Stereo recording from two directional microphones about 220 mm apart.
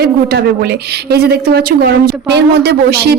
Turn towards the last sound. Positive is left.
turn(degrees=-50)  # may be behind; listen again after turning